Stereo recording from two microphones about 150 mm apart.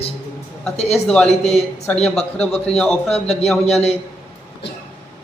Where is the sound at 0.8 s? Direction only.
45° left (ahead or behind).